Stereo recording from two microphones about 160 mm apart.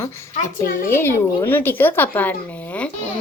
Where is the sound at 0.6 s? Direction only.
60° left (ahead or behind).